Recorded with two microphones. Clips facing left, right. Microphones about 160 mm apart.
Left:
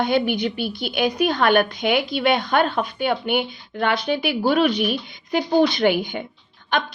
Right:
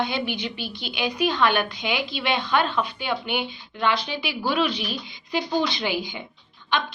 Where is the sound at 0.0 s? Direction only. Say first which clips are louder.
Left 7 dB; 50° left (ahead or behind).